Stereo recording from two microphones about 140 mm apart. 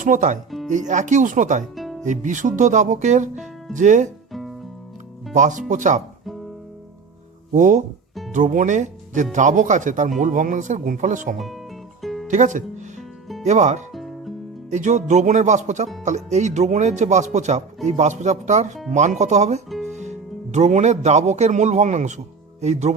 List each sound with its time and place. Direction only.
0.0 s speech: 65° right (ahead or behind)
1.7 s music: centre (ahead or behind)
2.0 s speech: 65° right (ahead or behind)
4.3 s music: centre (ahead or behind)
5.3 s speech: 65° right (ahead or behind)
7.5 s speech: 65° right (ahead or behind)
11.3 s speech: centre (ahead or behind)
12.0 s music: centre (ahead or behind)
12.3 s speech: 60° right (ahead or behind)
13.9 s music: centre (ahead or behind)
14.7 s speech: 60° right (ahead or behind)